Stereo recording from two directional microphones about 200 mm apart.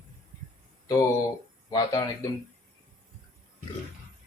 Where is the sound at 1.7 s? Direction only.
15° left (ahead or behind).